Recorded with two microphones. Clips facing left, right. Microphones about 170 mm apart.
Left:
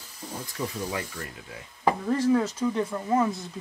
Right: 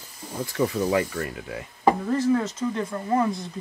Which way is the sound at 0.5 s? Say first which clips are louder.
Right 10 dB; 90° right.